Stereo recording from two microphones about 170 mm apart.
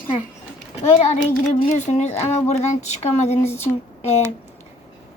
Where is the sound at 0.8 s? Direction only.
40° left (ahead or behind).